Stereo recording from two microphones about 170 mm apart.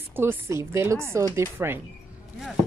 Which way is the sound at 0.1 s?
15° right (ahead or behind).